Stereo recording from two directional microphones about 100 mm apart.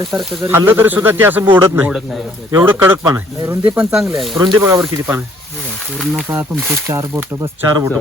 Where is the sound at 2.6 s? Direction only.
25° right (ahead or behind).